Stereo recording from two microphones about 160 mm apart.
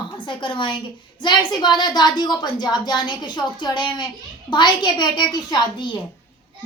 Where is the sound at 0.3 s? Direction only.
30° left (ahead or behind).